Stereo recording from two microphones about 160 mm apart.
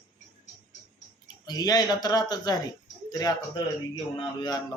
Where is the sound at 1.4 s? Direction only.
25° left (ahead or behind).